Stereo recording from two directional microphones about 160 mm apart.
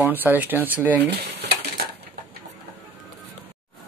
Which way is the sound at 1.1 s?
90° right.